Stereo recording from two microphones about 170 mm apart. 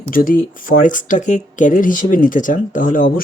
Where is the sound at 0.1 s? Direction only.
55° left (ahead or behind).